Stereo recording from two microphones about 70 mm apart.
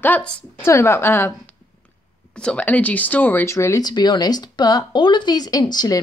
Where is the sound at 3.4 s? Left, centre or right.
Left.